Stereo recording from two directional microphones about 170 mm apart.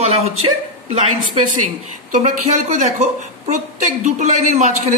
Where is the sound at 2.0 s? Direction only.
45° right (ahead or behind).